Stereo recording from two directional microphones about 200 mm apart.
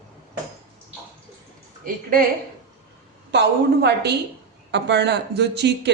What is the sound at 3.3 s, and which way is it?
A woman's voice, 55° right (ahead or behind).